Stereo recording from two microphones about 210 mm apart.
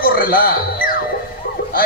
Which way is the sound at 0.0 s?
45° left (ahead or behind).